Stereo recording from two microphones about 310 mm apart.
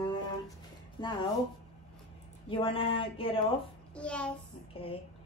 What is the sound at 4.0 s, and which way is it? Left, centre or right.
Speech, centre.